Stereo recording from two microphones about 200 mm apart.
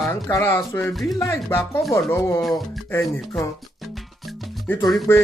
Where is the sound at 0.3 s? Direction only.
10° left (ahead or behind).